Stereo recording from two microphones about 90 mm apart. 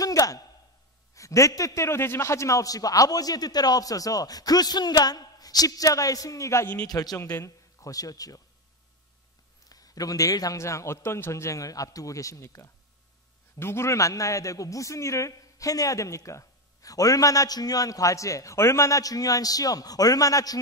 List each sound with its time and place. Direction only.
0.0 s a man's voice: 40° left (ahead or behind)
6.9 s a man's voice: 45° left (ahead or behind)
7.2 s speech: 35° left (ahead or behind)
9.7 s a man's voice: 45° left (ahead or behind)